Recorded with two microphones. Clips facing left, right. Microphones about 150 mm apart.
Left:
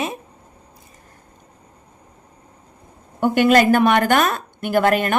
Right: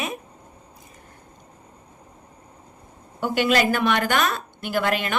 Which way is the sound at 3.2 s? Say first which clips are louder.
Left 6 dB; 50° left (ahead or behind).